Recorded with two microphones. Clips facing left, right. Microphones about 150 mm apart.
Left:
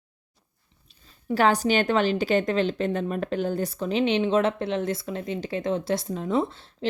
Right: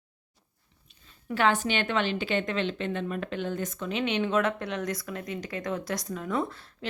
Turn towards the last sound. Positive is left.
turn(degrees=25)  # may be behind; listen again after turning